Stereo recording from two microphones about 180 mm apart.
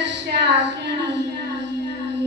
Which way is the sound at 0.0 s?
75° right (ahead or behind).